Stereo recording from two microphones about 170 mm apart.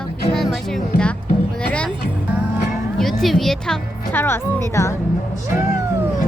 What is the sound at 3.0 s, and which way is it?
Speech, centre (ahead or behind).